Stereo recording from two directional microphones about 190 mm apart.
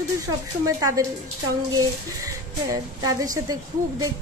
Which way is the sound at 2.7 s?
20° right (ahead or behind).